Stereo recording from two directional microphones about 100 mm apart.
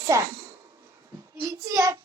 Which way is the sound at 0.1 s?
30° right (ahead or behind).